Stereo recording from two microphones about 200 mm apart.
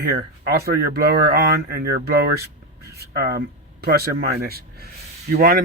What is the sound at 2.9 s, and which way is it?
Speech, 50° right (ahead or behind).